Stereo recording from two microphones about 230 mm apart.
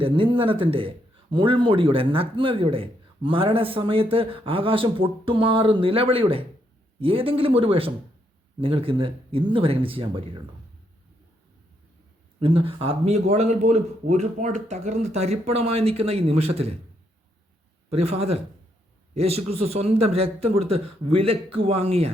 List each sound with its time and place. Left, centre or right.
0.0 s a man's voice: right
12.4 s a man's voice: right
17.8 s a man's voice: right